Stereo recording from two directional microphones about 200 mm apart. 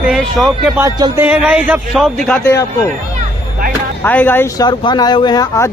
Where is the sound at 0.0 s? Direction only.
5° right (ahead or behind).